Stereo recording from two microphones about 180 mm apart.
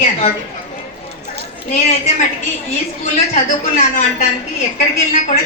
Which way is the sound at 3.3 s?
40° left (ahead or behind).